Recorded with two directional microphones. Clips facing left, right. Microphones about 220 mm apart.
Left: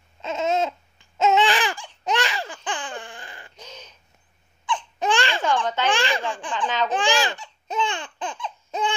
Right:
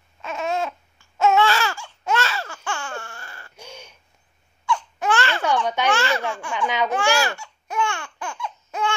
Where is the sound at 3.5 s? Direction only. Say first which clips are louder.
Right 2 dB; 10° right (ahead or behind).